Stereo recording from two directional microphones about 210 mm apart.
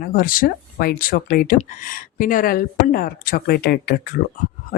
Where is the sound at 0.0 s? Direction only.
45° left (ahead or behind).